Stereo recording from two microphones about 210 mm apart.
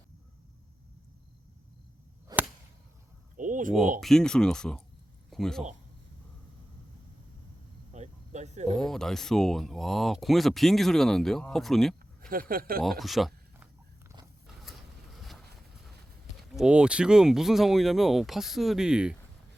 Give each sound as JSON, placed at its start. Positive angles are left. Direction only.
{"t": 2.2, "sound": "whip", "side_deg": -10}
{"t": 3.3, "sound": "a sound", "side_deg": -40}
{"t": 4.0, "sound": "speech", "side_deg": 0}
{"t": 7.9, "sound": "a sound", "side_deg": -35}
{"t": 8.8, "sound": "speech", "side_deg": 0}
{"t": 12.3, "sound": "speech", "side_deg": -45}
{"t": 12.8, "sound": "speech", "side_deg": 0}
{"t": 14.4, "sound": "vehicle", "side_deg": 0}
{"t": 16.4, "sound": "speech", "side_deg": -5}